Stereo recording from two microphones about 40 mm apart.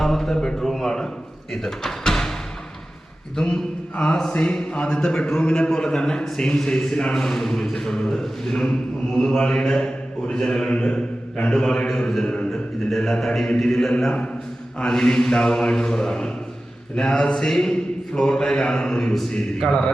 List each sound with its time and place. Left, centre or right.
0.0 s a sound: centre
1.6 s speech: centre
3.3 s a man's voice: left
10.7 s mantra: left
13.1 s a man's voice: centre